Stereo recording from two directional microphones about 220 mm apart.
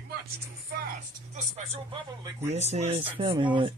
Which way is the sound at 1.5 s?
30° right (ahead or behind).